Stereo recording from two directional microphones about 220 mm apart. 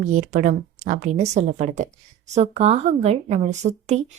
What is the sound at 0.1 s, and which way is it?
Speech, 35° right (ahead or behind).